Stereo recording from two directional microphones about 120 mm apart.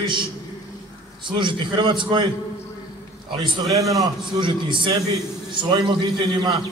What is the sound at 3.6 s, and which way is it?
Speech, 25° right (ahead or behind).